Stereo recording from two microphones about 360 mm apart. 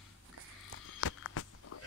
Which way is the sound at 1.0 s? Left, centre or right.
Left.